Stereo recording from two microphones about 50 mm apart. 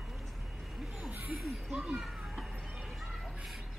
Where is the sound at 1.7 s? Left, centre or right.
Right.